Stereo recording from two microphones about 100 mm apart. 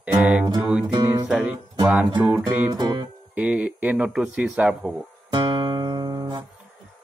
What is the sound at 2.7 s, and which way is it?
Music, 40° right (ahead or behind).